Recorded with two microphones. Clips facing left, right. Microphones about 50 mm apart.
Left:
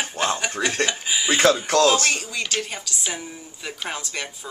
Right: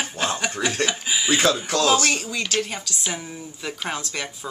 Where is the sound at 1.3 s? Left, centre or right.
Left.